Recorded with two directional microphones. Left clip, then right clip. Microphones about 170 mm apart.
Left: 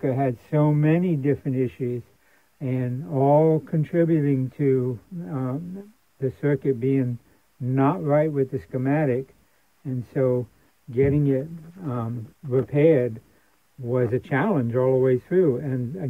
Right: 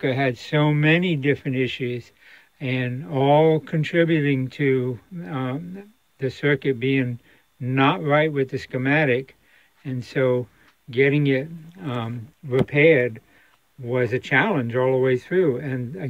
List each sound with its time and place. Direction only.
0.0 s speech: 15° right (ahead or behind)